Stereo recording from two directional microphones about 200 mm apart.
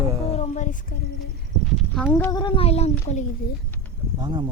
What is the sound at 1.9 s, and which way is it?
Speech, 5° left (ahead or behind).